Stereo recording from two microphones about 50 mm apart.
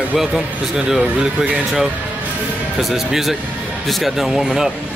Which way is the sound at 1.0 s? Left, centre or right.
Right.